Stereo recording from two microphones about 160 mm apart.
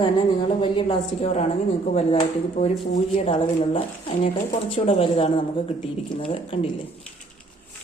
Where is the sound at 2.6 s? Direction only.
40° left (ahead or behind).